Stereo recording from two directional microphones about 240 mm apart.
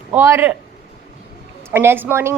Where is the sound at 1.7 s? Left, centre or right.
Centre.